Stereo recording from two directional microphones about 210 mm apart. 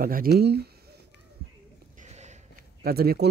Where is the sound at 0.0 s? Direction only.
45° right (ahead or behind).